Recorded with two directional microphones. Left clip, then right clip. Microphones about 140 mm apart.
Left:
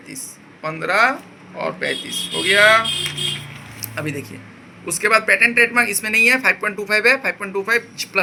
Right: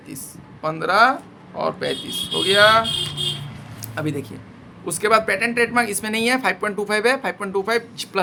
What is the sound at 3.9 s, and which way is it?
Speech, 90° right.